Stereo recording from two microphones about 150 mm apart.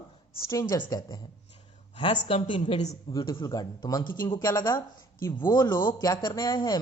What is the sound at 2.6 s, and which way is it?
Speech, 50° left (ahead or behind).